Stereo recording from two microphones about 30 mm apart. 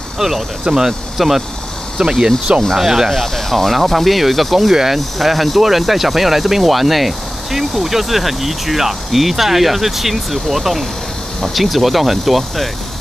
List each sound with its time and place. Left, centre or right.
0.2 s speech: centre
2.0 s speech: centre
3.1 s speech: centre